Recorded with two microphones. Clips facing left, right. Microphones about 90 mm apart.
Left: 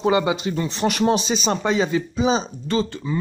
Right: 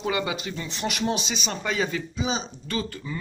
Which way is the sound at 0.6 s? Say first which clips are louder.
Left 8 dB; 40° left (ahead or behind).